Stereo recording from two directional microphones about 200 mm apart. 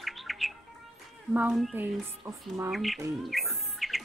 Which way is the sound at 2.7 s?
Centre (ahead or behind).